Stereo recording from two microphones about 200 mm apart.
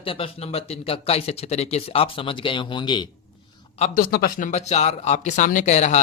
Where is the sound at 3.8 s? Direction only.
35° left (ahead or behind).